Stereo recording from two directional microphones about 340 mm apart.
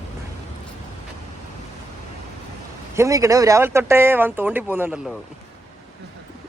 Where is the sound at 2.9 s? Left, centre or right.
Centre.